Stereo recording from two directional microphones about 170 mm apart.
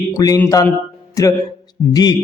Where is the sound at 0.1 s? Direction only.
20° left (ahead or behind).